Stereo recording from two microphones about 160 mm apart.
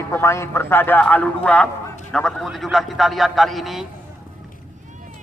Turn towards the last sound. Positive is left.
turn(degrees=0)  # may be behind; listen again after turning